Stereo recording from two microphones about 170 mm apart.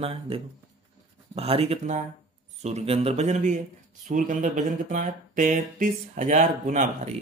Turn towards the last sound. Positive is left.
turn(degrees=-45)  # may be behind; listen again after turning